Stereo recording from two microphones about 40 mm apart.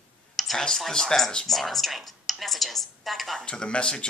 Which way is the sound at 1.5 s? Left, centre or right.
Centre.